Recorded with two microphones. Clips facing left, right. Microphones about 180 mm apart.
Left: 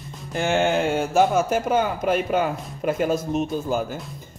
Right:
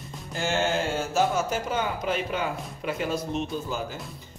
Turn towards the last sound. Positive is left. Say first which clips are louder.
# left 6 dB
turn(degrees=45)  # may be behind; listen again after turning